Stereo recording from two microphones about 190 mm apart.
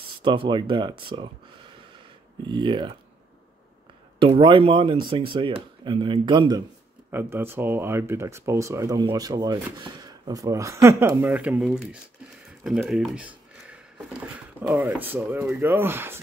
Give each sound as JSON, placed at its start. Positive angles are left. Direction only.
{"t": 0.2, "sound": "speech", "side_deg": -25}
{"t": 2.4, "sound": "speech", "side_deg": -25}
{"t": 4.2, "sound": "speech", "side_deg": -25}
{"t": 7.1, "sound": "speech", "side_deg": -10}